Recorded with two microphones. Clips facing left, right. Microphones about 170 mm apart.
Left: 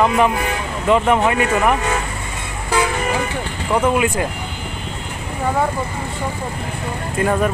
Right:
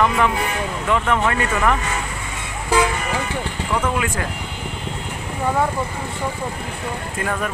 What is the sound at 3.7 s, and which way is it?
Speech, 20° left (ahead or behind).